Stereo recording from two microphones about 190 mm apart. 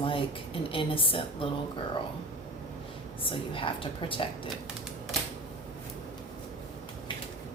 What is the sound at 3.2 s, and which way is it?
Speech, 30° left (ahead or behind).